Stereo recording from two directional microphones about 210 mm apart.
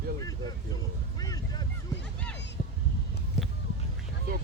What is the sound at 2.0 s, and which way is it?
Music, 5° left (ahead or behind).